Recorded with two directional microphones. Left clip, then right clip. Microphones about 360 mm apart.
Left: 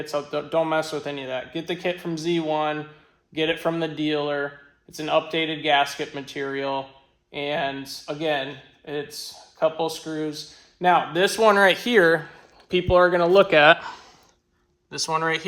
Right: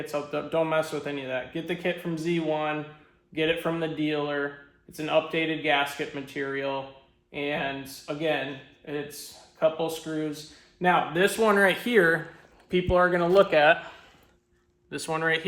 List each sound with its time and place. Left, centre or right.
0.0 s speech: centre
9.6 s speech: centre